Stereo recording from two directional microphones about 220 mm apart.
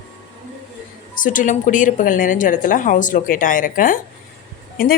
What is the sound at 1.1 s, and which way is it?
A woman's voice, 35° left (ahead or behind).